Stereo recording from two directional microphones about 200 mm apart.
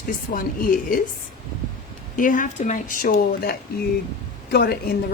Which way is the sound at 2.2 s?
40° left (ahead or behind).